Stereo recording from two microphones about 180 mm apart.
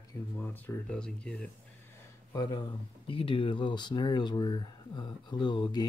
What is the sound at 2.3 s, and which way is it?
Speech, 20° left (ahead or behind).